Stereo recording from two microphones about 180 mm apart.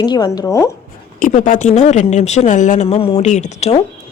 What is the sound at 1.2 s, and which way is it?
A woman's voice, 45° left (ahead or behind).